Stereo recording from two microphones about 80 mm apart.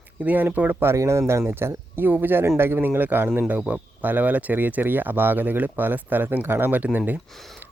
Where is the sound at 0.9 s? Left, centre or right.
Right; by 7.2 s centre.